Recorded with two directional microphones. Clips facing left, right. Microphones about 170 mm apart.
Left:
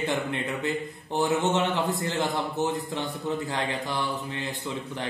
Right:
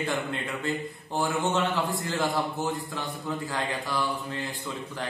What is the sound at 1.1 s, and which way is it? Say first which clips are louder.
Speech: left 3 dB; 20° left (ahead or behind).